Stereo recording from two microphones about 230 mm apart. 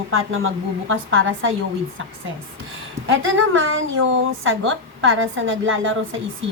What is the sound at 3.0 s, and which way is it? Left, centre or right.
Speech, right.